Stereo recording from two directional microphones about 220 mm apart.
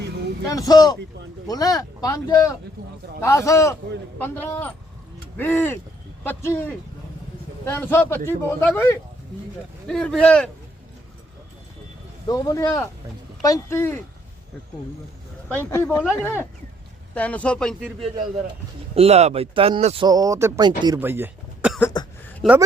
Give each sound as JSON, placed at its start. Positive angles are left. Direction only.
{"t": 0.4, "sound": "speech", "side_deg": 15}
{"t": 12.3, "sound": "speech", "side_deg": 15}
{"t": 15.4, "sound": "speech", "side_deg": 10}
{"t": 18.9, "sound": "speech", "side_deg": -30}
{"t": 20.8, "sound": "a sound", "side_deg": -15}
{"t": 21.8, "sound": "cough", "side_deg": 10}